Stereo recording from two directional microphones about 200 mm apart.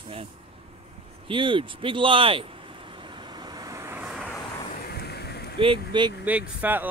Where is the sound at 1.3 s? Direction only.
25° right (ahead or behind); by 4.4 s centre (ahead or behind).